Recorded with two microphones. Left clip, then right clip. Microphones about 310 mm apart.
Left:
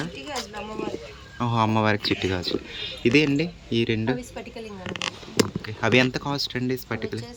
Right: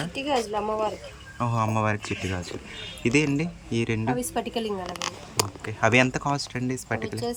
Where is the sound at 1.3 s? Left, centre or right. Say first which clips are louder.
Left 3 dB; centre.